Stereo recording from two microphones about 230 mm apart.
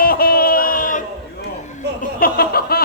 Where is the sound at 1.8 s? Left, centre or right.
Right.